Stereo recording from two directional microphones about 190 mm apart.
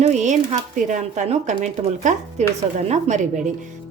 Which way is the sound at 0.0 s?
35° right (ahead or behind).